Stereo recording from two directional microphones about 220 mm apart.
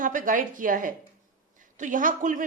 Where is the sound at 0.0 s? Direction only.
35° right (ahead or behind).